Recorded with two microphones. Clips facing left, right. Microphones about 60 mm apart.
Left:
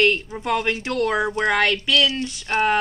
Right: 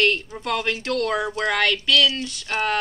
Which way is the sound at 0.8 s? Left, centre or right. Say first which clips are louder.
Left 1 dB; centre.